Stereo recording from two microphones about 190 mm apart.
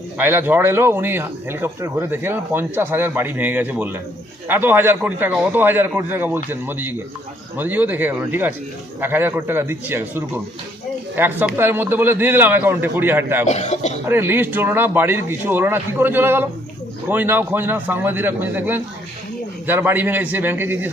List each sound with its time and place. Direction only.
0.2 s speech: 10° right (ahead or behind)
13.5 s a man's voice: 35° left (ahead or behind)
14.0 s speech: 10° right (ahead or behind)